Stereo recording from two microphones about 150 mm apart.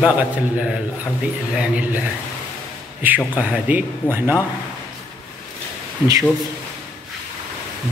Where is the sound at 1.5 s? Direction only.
5° right (ahead or behind).